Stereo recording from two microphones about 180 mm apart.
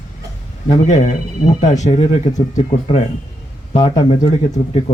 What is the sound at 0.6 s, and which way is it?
Speech, 40° left (ahead or behind).